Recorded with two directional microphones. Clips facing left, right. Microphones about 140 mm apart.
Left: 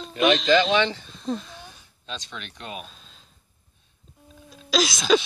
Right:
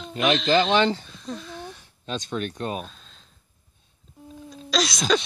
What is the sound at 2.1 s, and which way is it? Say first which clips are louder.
Speech: right 9 dB; 45° right (ahead or behind).